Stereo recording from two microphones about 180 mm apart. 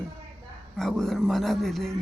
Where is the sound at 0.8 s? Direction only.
Centre (ahead or behind).